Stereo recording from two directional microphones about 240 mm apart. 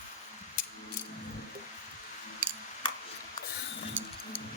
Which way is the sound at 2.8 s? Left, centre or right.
Centre.